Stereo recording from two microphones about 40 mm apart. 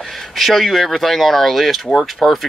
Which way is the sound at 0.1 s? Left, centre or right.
Centre.